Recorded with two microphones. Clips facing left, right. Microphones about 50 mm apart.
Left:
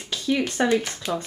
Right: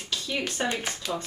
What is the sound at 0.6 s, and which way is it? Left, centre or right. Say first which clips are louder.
Speech: left 7 dB; centre.